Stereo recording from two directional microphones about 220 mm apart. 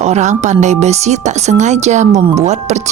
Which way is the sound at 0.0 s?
30° right (ahead or behind).